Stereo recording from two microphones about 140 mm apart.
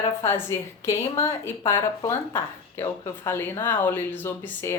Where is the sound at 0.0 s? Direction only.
20° left (ahead or behind).